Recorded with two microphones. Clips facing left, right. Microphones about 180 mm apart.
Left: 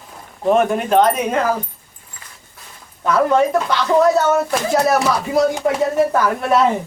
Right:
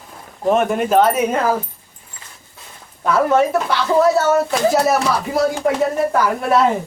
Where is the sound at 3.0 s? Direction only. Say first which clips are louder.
Even; 5° right (ahead or behind).